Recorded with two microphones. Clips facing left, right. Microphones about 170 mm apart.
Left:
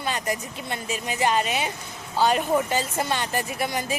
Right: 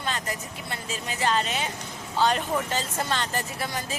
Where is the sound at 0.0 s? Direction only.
15° left (ahead or behind).